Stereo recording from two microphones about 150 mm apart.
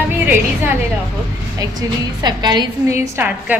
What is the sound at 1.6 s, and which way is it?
A woman's voice, 25° right (ahead or behind).